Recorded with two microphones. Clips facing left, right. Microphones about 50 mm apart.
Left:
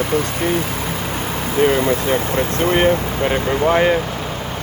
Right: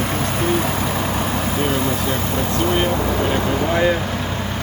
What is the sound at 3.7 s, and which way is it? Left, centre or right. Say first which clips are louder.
Speech: left 2 dB; left.